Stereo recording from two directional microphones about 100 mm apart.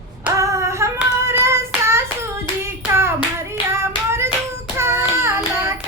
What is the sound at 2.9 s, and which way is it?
Clapping, 25° right (ahead or behind).